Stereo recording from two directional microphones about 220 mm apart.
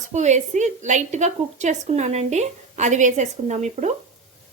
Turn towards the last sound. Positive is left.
turn(degrees=-30)  # may be behind; listen again after turning